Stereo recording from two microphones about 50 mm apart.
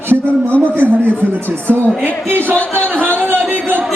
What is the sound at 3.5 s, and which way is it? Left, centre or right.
Speech, right.